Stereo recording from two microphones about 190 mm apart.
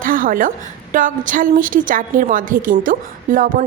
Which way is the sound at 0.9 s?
45° right (ahead or behind).